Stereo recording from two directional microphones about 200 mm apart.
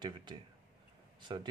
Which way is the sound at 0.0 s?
25° right (ahead or behind).